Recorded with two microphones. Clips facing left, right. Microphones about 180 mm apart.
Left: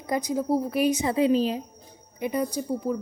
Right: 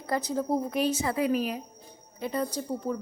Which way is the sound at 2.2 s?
15° left (ahead or behind).